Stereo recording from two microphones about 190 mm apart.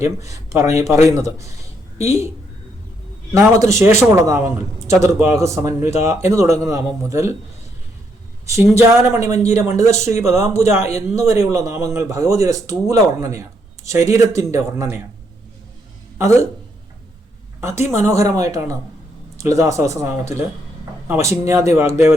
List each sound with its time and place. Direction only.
0.0 s speech: 15° right (ahead or behind)
3.7 s speech: 15° right (ahead or behind)
8.4 s speech: 15° right (ahead or behind)
17.6 s speech: 15° right (ahead or behind)